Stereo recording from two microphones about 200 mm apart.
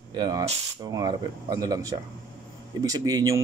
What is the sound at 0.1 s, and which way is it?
Speech, 20° right (ahead or behind).